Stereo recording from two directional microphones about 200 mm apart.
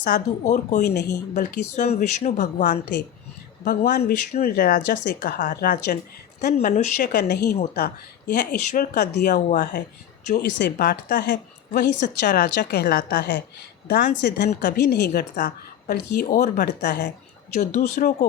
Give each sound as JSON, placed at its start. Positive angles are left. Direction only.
{"t": 0.0, "sound": "speech", "side_deg": 40}
{"t": 17.6, "sound": "speech", "side_deg": 35}